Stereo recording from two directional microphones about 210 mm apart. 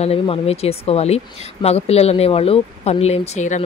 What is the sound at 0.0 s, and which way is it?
Speech, 30° left (ahead or behind).